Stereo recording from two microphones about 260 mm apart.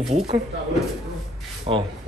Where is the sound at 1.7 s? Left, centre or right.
Centre.